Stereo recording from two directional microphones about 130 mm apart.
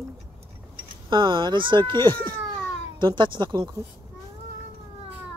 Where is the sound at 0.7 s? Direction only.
40° right (ahead or behind).